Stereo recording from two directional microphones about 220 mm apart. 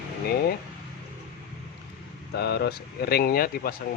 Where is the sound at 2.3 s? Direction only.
50° left (ahead or behind).